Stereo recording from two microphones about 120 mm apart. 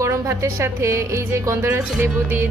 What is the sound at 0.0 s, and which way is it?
A woman's voice, 25° right (ahead or behind).